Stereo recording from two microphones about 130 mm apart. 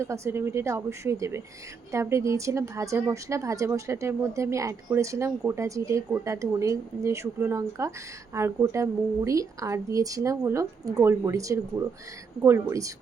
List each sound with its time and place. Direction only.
0.0 s speech: 20° right (ahead or behind)